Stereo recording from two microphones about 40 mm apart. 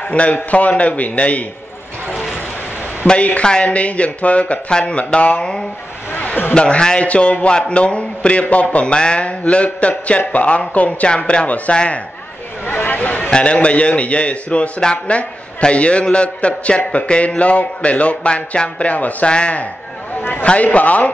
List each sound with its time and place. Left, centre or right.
0.1 s a man's voice: left
3.2 s a man's voice: left
6.1 s a sound: left
6.5 s a man's voice: left
8.7 s a man's voice: left
11.1 s a man's voice: left
11.4 s a man's voice: left
11.7 s a man's voice: left
12.6 s a sound: left
13.3 s a man's voice: left
19.2 s a man's voice: left